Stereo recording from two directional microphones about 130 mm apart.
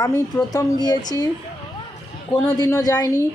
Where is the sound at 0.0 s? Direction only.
30° left (ahead or behind).